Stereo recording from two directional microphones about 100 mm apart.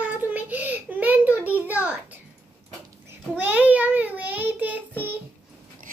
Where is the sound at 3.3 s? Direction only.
15° right (ahead or behind).